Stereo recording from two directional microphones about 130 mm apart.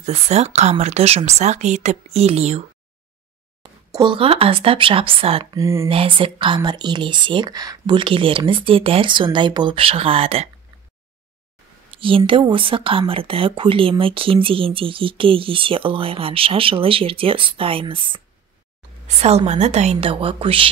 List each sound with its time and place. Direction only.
0.0 s speech: 55° right (ahead or behind)
3.6 s speech: 40° right (ahead or behind)
5.4 s speech: 25° right (ahead or behind)
5.9 s speech: 45° right (ahead or behind)
11.9 s a sound: 40° right (ahead or behind)
12.3 s speech: 40° right (ahead or behind)
19.0 s speech: 55° right (ahead or behind)